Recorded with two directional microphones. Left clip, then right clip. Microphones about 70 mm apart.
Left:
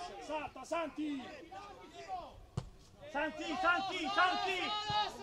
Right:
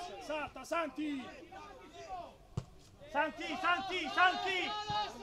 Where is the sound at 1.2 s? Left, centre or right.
Left.